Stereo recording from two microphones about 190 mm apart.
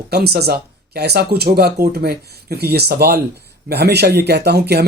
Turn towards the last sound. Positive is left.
turn(degrees=-60)  # may be behind; listen again after turning